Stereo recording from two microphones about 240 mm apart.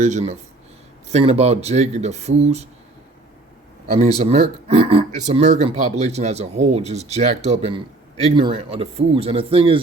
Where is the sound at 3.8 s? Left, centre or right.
Right.